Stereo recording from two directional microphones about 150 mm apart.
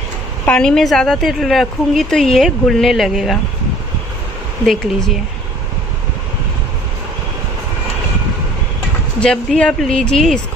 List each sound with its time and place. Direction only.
0.5 s a woman's voice: 5° left (ahead or behind)
9.2 s a woman's voice: 5° left (ahead or behind)